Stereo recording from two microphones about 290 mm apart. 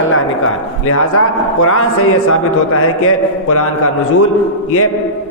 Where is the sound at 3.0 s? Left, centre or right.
Left.